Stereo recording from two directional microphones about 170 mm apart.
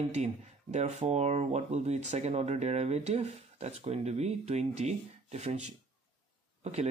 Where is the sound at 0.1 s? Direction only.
40° right (ahead or behind).